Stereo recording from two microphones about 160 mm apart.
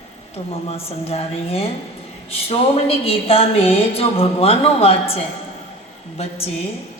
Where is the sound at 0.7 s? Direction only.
40° left (ahead or behind).